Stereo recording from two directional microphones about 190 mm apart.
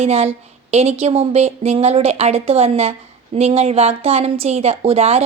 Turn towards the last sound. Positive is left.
turn(degrees=-35)  # may be behind; listen again after turning